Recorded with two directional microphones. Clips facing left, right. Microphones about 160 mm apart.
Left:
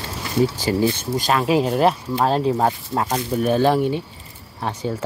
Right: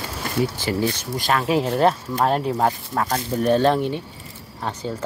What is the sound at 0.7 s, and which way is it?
Speech, 25° left (ahead or behind).